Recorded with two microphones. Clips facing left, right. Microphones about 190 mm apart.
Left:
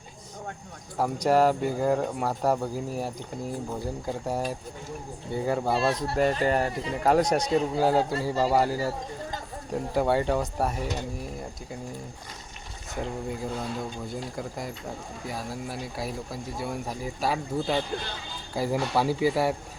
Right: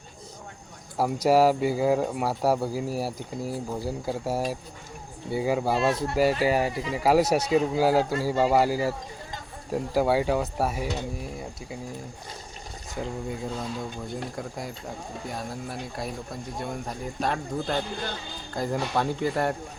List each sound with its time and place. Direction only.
0.9 s speech: 10° right (ahead or behind)
13.0 s speech: centre (ahead or behind)